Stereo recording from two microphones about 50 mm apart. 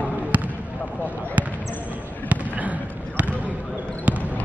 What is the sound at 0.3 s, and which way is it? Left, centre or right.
Basketball bounce, right.